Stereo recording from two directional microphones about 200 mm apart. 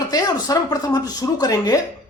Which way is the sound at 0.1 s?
20° left (ahead or behind).